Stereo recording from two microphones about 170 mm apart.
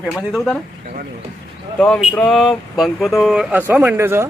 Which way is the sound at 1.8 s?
5° left (ahead or behind).